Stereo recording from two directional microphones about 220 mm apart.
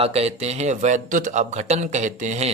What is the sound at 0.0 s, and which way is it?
A man's voice, 30° right (ahead or behind).